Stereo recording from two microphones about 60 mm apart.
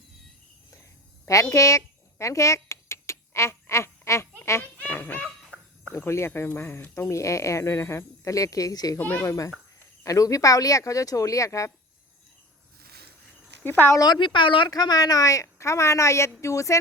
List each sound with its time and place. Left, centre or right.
1.3 s a sound: left
4.6 s honk: left
6.1 s speech: left
6.9 s speech: left
9.0 s speech: left
9.2 s speech: left
13.7 s speech: left
14.7 s speech: left